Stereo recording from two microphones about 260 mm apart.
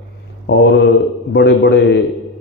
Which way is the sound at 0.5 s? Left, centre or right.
Left.